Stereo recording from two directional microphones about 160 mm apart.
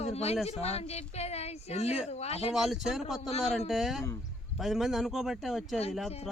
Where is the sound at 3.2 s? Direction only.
40° left (ahead or behind).